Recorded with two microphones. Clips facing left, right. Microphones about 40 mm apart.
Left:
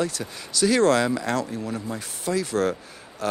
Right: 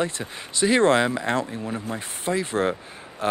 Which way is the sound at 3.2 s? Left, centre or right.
Right.